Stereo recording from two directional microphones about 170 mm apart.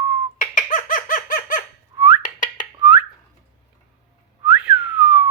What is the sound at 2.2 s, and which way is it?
Whistling, 50° left (ahead or behind).